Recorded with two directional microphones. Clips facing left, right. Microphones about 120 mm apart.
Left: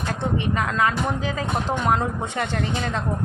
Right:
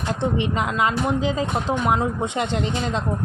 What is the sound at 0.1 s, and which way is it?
Speech, 20° right (ahead or behind).